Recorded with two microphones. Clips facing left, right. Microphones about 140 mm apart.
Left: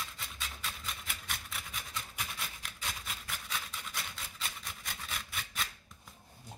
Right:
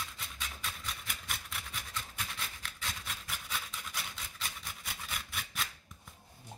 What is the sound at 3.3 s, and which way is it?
Rub, centre (ahead or behind).